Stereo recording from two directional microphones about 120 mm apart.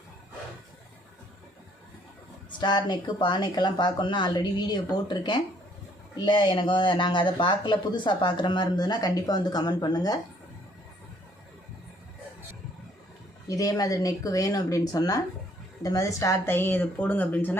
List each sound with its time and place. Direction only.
2.5 s speech: 40° left (ahead or behind)
13.5 s speech: 30° left (ahead or behind); by 17.6 s 15° left (ahead or behind)